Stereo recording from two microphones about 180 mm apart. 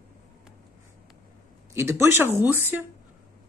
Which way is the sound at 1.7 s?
15° right (ahead or behind).